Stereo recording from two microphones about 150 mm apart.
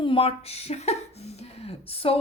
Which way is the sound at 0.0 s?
40° left (ahead or behind).